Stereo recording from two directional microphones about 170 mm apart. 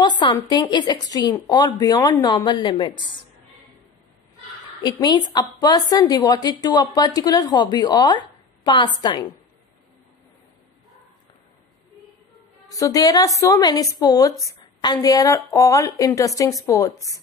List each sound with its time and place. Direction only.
0.0 s a woman's voice: 25° left (ahead or behind)
5.0 s a woman's voice: 20° left (ahead or behind)
12.6 s a woman's voice: 20° left (ahead or behind)